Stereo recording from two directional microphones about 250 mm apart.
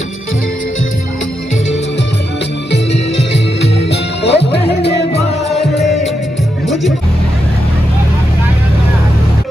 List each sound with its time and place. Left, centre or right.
2.7 s music: left
5.5 s music: centre